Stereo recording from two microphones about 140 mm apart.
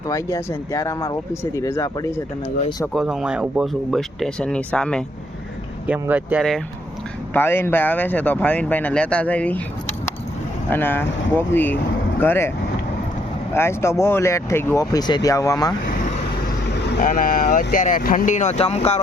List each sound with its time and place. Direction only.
0.1 s speech: 25° left (ahead or behind)
2.9 s speech: 5° right (ahead or behind)
5.8 s speech: 10° right (ahead or behind)
7.3 s speech: 15° left (ahead or behind)
10.7 s speech: 15° left (ahead or behind)
13.5 s speech: 20° left (ahead or behind)
17.0 s speech: 70° left (ahead or behind); by 18.9 s 45° left (ahead or behind)